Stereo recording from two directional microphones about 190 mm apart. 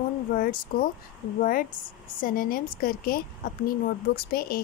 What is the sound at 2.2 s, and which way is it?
A woman's voice, 50° left (ahead or behind).